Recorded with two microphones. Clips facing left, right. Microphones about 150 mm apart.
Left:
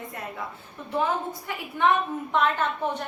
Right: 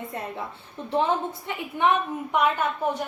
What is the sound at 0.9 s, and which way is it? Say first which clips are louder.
Speech: right 2 dB; 25° right (ahead or behind).